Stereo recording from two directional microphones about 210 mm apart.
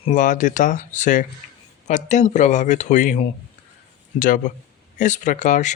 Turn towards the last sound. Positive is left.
turn(degrees=35)  # may be behind; listen again after turning